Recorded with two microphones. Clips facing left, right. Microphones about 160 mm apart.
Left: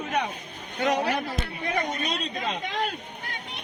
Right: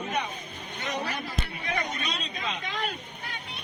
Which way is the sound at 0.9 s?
90° left.